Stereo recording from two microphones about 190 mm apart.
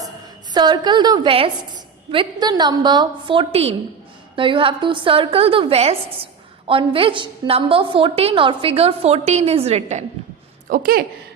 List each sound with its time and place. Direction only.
0.5 s a woman's voice: 25° right (ahead or behind)
10.7 s a woman's voice: 50° right (ahead or behind)